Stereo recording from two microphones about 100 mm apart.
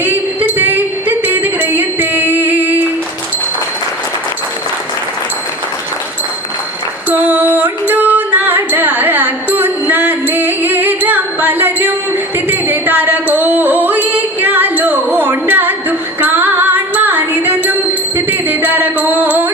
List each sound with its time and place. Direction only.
0.0 s a sound: 15° right (ahead or behind)
7.1 s female singing: 15° right (ahead or behind)
12.5 s music: 20° right (ahead or behind)